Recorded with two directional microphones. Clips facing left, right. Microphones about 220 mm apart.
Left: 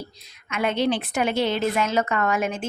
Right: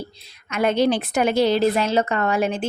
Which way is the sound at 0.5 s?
40° right (ahead or behind).